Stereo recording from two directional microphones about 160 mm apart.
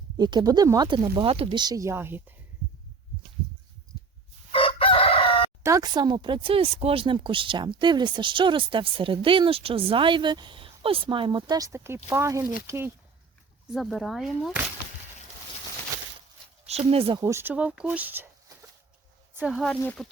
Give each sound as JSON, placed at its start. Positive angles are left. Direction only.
{"t": 0.2, "sound": "speech", "side_deg": -25}
{"t": 4.5, "sound": "crowing", "side_deg": 35}
{"t": 5.6, "sound": "speech", "side_deg": -20}
{"t": 13.7, "sound": "speech", "side_deg": 0}
{"t": 16.6, "sound": "speech", "side_deg": -40}
{"t": 17.2, "sound": "speech", "side_deg": -20}